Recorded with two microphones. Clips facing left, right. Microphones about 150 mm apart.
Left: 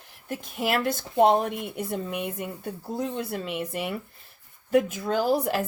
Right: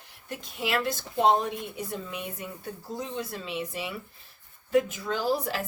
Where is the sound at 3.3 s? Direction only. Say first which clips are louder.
Left 4 dB; 60° left (ahead or behind).